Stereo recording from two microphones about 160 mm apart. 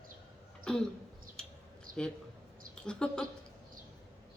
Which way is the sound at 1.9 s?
60° right (ahead or behind).